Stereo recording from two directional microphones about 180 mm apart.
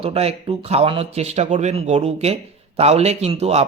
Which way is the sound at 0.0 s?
35° right (ahead or behind).